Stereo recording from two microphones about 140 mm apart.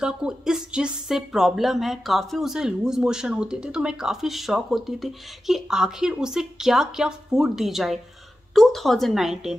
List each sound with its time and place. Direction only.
0.0 s a woman's voice: 5° right (ahead or behind)